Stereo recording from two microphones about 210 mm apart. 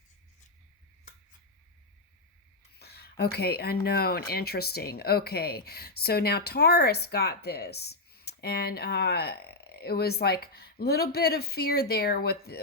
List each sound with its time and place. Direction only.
2.7 s speech: 50° left (ahead or behind)